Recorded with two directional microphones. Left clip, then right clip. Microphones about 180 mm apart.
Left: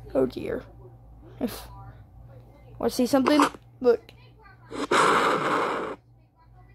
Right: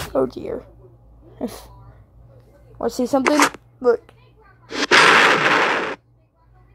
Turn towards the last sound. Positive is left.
turn(degrees=-25)  # may be behind; listen again after turning